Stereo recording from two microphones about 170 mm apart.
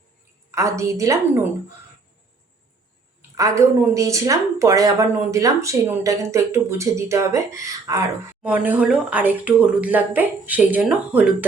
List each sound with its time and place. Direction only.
0.5 s speech: 15° right (ahead or behind)
3.3 s speech: 20° right (ahead or behind)